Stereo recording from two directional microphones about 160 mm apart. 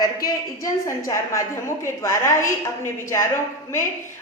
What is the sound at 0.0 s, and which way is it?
A woman's voice, 20° left (ahead or behind).